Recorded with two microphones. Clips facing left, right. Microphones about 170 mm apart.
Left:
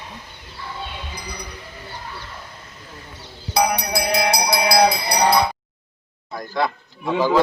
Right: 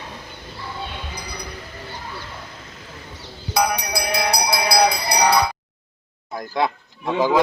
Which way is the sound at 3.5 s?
30° left (ahead or behind).